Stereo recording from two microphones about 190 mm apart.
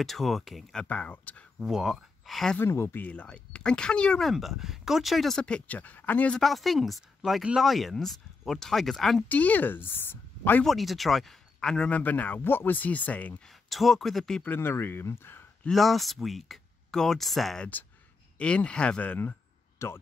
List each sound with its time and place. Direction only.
0.0 s speech: centre (ahead or behind)